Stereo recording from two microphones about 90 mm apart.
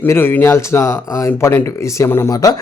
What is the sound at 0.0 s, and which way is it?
Speech, 25° left (ahead or behind).